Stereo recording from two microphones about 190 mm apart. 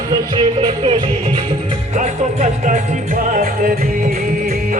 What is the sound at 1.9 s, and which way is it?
Music, 40° right (ahead or behind).